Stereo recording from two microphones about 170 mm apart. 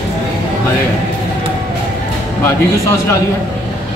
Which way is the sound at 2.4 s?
15° left (ahead or behind).